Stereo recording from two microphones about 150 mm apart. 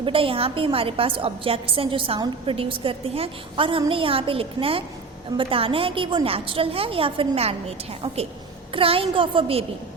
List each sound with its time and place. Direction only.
0.0 s a woman's voice: 35° right (ahead or behind)